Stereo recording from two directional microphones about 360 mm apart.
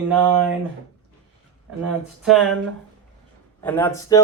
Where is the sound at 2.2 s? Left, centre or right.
Centre.